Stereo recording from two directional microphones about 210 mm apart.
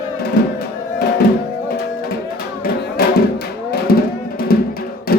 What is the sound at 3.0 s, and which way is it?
Music, 50° left (ahead or behind).